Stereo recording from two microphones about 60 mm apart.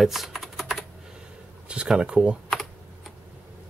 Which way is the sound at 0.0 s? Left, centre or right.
Centre.